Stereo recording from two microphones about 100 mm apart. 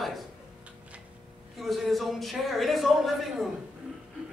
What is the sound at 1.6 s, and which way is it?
Speech, centre (ahead or behind).